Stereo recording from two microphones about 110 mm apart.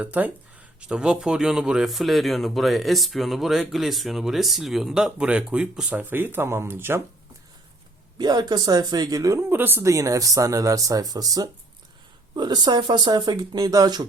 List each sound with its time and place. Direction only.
0.0 s speech: 15° right (ahead or behind)
5.9 s speech: 15° right (ahead or behind)
8.2 s speech: 40° right (ahead or behind)